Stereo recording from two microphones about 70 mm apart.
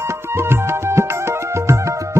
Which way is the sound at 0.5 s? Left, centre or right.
Right.